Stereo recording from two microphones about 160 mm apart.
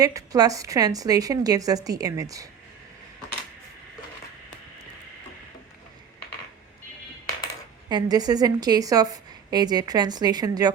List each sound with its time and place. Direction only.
0.0 s a woman's voice: 20° right (ahead or behind)
7.9 s a woman's voice: 25° right (ahead or behind)